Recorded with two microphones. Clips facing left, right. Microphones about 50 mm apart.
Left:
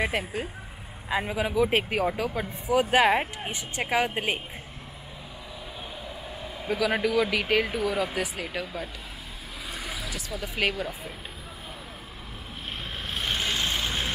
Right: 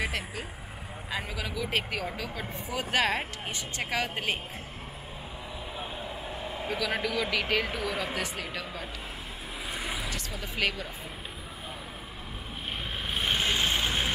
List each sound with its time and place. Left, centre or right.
0.2 s speech: centre
5.8 s a sound: centre
6.8 s speech: centre
9.7 s vehicle: centre
10.3 s speech: centre
13.1 s vehicle: centre